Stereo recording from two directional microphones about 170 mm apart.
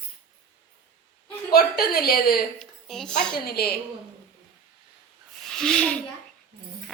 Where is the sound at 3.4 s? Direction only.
65° left (ahead or behind).